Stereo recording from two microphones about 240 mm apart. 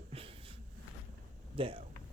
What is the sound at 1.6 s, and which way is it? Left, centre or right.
Speech, right.